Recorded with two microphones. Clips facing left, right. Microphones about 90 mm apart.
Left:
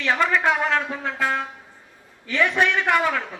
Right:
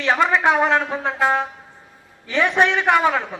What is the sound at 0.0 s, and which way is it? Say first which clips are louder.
A man's voice: right 3 dB; 20° right (ahead or behind).